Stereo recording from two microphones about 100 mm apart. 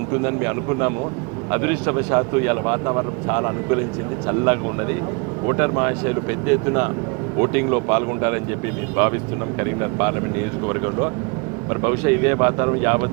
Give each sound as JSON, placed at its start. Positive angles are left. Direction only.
{"t": 0.1, "sound": "speech", "side_deg": -25}
{"t": 9.6, "sound": "speech", "side_deg": -25}